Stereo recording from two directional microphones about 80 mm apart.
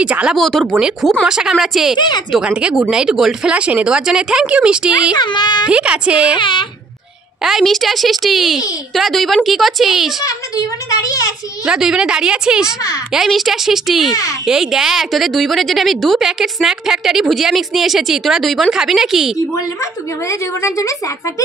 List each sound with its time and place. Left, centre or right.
0.0 s speech: centre
0.4 s a woman's voice: centre
1.2 s a woman's voice: centre
2.0 s speech: left
2.4 s speech: centre
5.1 s a child's voice: left
5.7 s speech: centre
6.3 s speech: left
7.4 s a woman's voice: centre
10.2 s a woman's voice: left
11.6 s a woman's voice: centre
19.8 s a woman's voice: left